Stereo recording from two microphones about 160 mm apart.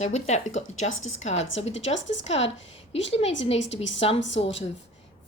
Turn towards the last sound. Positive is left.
turn(degrees=40)  # may be behind; listen again after turning